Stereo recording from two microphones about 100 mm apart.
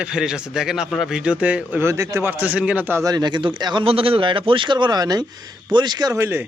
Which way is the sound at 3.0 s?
45° right (ahead or behind).